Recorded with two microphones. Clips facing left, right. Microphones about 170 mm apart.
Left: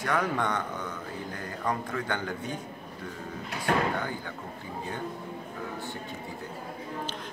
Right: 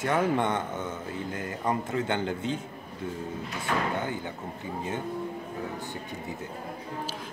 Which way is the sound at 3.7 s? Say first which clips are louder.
Left 3 dB; 55° left (ahead or behind).